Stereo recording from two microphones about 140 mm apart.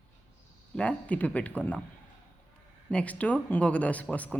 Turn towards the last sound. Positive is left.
turn(degrees=10)  # may be behind; listen again after turning